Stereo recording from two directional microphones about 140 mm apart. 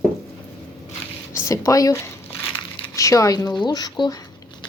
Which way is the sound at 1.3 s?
20° left (ahead or behind).